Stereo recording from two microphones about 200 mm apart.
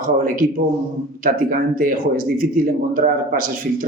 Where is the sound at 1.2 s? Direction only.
45° right (ahead or behind).